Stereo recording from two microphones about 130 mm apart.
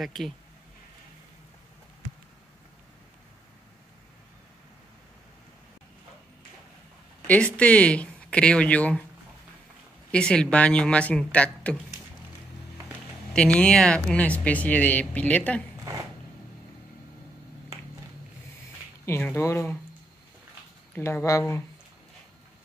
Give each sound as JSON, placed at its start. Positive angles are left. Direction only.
{"t": 0.0, "sound": "speech", "side_deg": 0}
{"t": 7.2, "sound": "speech", "side_deg": 10}
{"t": 10.1, "sound": "speech", "side_deg": 5}
{"t": 13.3, "sound": "speech", "side_deg": 5}
{"t": 19.3, "sound": "speech", "side_deg": 20}
{"t": 20.9, "sound": "speech", "side_deg": 20}